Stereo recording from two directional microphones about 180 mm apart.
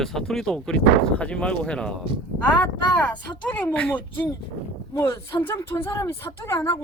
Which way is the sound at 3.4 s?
5° left (ahead or behind).